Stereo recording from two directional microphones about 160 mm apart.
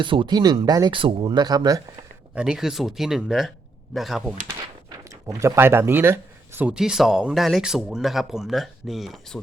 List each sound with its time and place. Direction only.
0.0 s speech: 30° right (ahead or behind)
2.3 s speech: 5° right (ahead or behind)
5.3 s speech: 15° right (ahead or behind); by 9.4 s centre (ahead or behind)